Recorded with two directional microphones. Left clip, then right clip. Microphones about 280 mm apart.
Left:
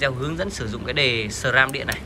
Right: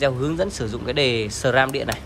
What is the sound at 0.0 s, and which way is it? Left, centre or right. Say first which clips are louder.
Speech: right 3 dB; centre.